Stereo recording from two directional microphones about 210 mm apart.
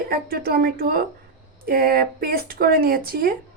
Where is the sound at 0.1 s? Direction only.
45° right (ahead or behind).